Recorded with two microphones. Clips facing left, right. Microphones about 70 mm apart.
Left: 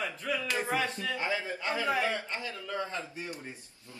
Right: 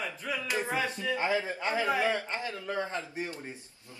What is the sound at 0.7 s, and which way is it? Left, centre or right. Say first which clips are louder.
Speech: even; centre.